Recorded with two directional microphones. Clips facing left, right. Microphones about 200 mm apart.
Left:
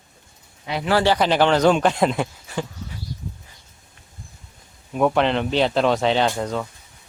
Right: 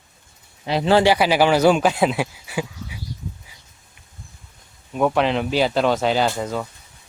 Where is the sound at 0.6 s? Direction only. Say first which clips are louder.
Right 4 dB; 30° right (ahead or behind).